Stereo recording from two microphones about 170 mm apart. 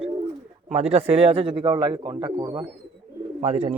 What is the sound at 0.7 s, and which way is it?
Speech, 40° right (ahead or behind).